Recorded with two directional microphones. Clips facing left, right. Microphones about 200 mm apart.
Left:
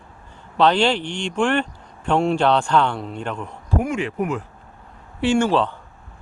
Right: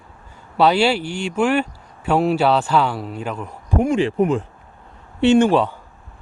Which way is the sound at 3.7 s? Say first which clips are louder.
Right 5 dB; 25° right (ahead or behind).